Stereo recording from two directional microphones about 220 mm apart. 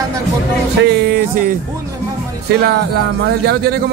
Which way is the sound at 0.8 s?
40° right (ahead or behind).